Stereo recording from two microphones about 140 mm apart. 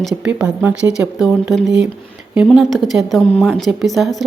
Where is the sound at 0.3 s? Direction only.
10° right (ahead or behind).